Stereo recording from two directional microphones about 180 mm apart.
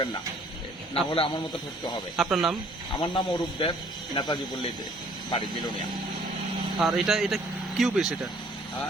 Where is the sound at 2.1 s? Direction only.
Centre (ahead or behind).